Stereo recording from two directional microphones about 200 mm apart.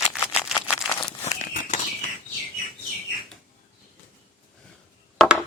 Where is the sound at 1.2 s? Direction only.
35° left (ahead or behind).